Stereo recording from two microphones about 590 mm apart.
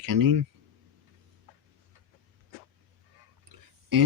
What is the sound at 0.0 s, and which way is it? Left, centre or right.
Speech, right.